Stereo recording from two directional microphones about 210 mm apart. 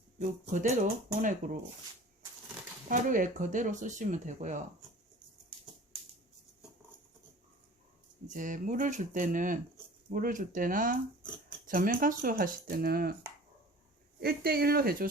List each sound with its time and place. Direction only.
0.2 s speech: 35° right (ahead or behind)
2.9 s speech: 40° right (ahead or behind)
8.3 s speech: 40° right (ahead or behind)
14.2 s speech: 45° right (ahead or behind)